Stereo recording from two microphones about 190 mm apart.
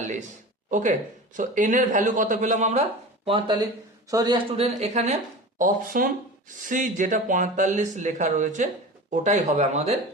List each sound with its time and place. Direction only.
0.0 s a sound: 40° right (ahead or behind)
0.7 s speech: 40° right (ahead or behind)
3.2 s speech: 25° right (ahead or behind)
4.5 s speech: 35° right (ahead or behind)